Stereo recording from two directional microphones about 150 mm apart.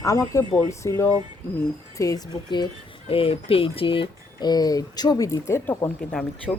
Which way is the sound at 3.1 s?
40° left (ahead or behind).